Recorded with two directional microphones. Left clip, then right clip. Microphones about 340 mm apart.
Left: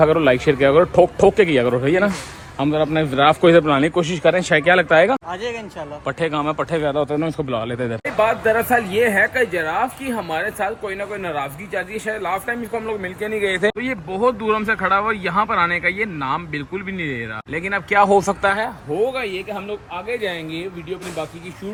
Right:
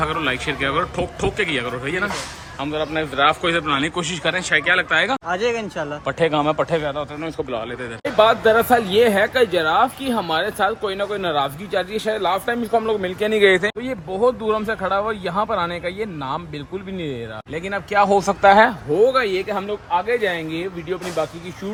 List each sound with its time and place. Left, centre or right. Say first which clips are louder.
0.0 s a man's voice: left 7 dB; centre
5.3 s a man's voice: right 5 dB; right
6.1 s speech: right 2 dB; centre
8.1 s speech: right 3 dB; centre
13.3 s a man's voice: right 6 dB; right
13.6 s speech: left 3 dB; centre